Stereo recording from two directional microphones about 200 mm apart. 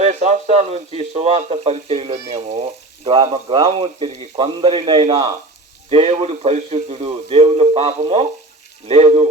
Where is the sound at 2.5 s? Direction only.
25° right (ahead or behind).